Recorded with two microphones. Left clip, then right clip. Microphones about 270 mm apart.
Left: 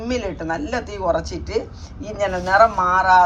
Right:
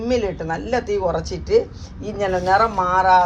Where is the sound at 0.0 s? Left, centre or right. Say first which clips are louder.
Right 3 dB; right.